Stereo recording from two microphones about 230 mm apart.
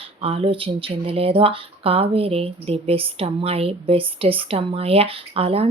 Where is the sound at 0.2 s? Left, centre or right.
Right.